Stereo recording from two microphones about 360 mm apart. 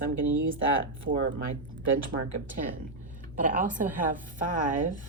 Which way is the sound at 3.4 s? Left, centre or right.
Right.